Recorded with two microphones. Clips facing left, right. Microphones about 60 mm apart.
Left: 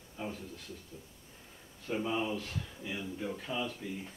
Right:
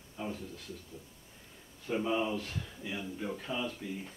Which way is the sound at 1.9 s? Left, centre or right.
Centre.